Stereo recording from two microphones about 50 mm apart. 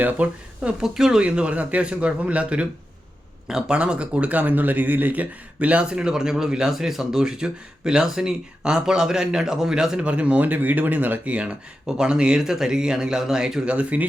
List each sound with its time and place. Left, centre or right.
0.0 s speech: right
0.8 s speech: centre
1.2 s speech: right
3.4 s speech: centre
3.8 s speech: right
10.1 s speech: right
11.3 s speech: centre
13.7 s speech: right